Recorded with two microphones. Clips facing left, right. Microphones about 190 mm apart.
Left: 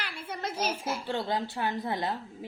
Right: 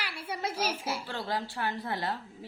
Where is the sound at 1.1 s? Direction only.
20° left (ahead or behind).